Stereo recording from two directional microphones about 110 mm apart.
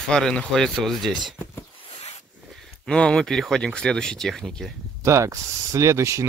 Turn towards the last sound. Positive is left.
turn(degrees=-25)  # may be behind; listen again after turning